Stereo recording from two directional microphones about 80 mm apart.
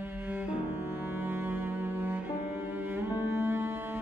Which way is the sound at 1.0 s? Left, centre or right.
Right.